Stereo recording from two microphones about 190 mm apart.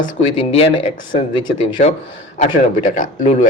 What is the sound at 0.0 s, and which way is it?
Speech, 30° left (ahead or behind).